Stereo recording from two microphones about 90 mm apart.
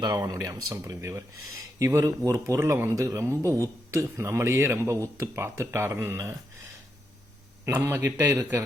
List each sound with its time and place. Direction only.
0.3 s speech: 40° right (ahead or behind)
7.6 s a man's voice: 25° right (ahead or behind)